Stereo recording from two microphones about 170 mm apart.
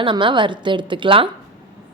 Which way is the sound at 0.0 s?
30° right (ahead or behind).